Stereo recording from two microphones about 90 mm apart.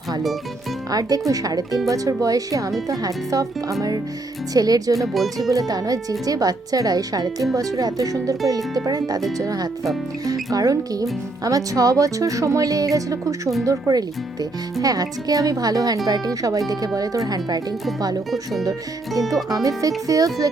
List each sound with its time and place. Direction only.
0.9 s speech: 45° right (ahead or behind)
4.9 s speech: centre (ahead or behind)
5.5 s speech: 45° right (ahead or behind)
19.5 s speech: 40° right (ahead or behind)